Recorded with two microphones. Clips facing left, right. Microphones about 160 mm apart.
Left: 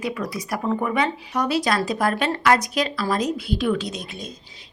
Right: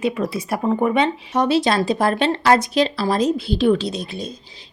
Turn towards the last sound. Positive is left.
turn(degrees=-30)  # may be behind; listen again after turning